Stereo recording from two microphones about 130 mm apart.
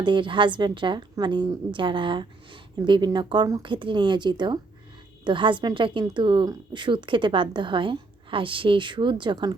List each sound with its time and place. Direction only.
0.0 s a woman's voice: 40° right (ahead or behind)